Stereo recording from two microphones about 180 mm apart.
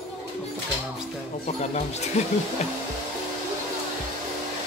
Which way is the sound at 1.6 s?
40° left (ahead or behind).